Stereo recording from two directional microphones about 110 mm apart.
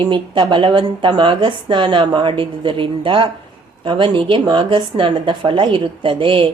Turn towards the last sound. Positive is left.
turn(degrees=-50)  # may be behind; listen again after turning